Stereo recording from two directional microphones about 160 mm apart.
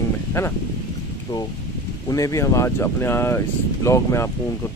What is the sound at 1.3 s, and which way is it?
Speech, 35° left (ahead or behind).